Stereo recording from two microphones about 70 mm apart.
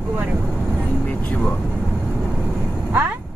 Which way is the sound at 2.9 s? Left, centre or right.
Right.